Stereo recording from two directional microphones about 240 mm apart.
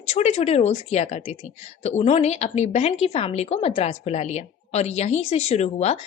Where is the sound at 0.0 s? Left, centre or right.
Left.